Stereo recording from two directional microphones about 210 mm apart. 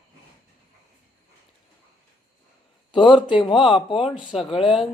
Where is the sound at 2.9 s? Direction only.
20° left (ahead or behind).